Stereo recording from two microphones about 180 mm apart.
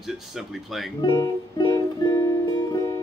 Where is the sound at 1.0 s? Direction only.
25° left (ahead or behind).